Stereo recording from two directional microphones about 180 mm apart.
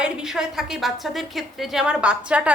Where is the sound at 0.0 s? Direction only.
5° right (ahead or behind).